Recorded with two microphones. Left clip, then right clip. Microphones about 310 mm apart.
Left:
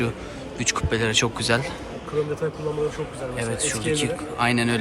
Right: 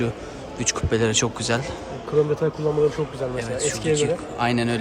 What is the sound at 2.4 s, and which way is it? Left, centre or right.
Speech, right.